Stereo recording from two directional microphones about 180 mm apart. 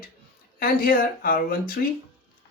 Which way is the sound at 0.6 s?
55° left (ahead or behind).